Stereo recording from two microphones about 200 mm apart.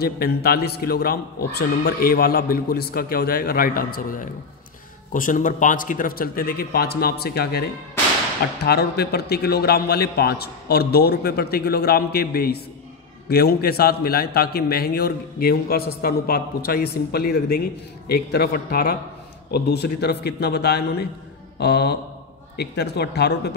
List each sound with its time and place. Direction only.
0.0 s a man's voice: 50° left (ahead or behind)